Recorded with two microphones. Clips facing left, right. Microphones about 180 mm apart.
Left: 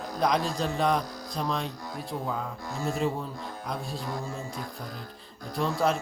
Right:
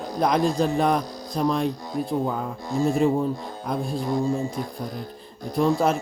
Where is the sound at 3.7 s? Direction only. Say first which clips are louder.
Right 8 dB; 50° right (ahead or behind).